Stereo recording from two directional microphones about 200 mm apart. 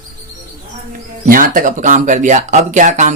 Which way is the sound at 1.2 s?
45° right (ahead or behind).